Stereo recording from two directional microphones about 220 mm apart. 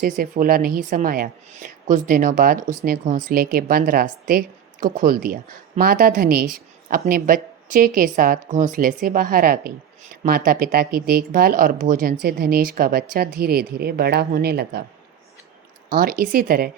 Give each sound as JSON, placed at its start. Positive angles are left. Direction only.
{"t": 0.0, "sound": "a woman's voice", "side_deg": -40}
{"t": 15.9, "sound": "a woman's voice", "side_deg": -40}